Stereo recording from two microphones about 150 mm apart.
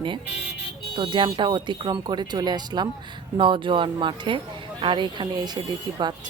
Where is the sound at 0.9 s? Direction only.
30° right (ahead or behind).